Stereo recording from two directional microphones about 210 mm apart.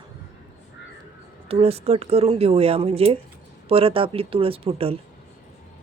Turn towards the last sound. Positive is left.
turn(degrees=-25)  # may be behind; listen again after turning